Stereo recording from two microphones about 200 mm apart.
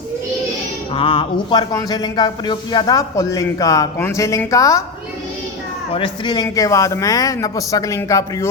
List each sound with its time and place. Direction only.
0.9 s speech: 25° left (ahead or behind)
5.9 s speech: 25° left (ahead or behind)